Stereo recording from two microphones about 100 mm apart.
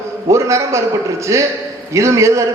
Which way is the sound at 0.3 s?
30° right (ahead or behind).